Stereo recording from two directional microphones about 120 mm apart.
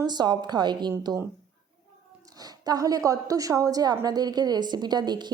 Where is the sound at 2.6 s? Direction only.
30° right (ahead or behind).